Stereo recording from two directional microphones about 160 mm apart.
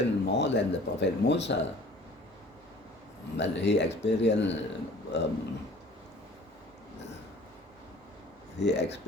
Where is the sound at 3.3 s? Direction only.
90° left.